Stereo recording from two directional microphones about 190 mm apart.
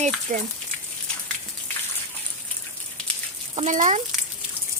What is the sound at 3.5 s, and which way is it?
Speech, 40° right (ahead or behind).